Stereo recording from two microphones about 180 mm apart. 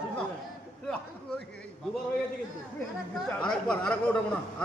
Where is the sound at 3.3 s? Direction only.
5° left (ahead or behind).